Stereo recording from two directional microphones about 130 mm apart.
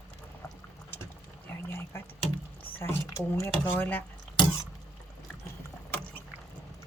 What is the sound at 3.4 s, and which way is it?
Speech, 15° left (ahead or behind).